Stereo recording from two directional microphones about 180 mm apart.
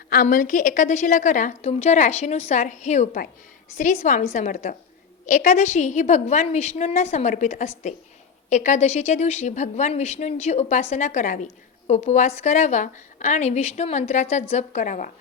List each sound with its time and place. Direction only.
0.1 s a woman's voice: 50° left (ahead or behind)